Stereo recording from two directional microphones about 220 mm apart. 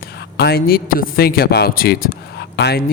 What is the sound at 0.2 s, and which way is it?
Speech, 45° left (ahead or behind).